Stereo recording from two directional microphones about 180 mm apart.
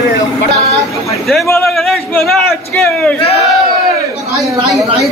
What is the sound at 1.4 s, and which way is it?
Speech, 15° left (ahead or behind).